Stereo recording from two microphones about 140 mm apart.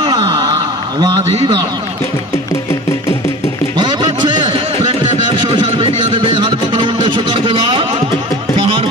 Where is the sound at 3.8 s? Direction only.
30° right (ahead or behind).